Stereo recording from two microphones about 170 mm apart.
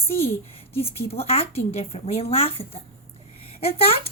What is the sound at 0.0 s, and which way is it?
A woman's voice, 35° left (ahead or behind).